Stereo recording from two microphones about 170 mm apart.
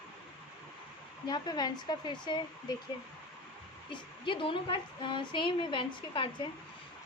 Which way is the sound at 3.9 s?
30° left (ahead or behind).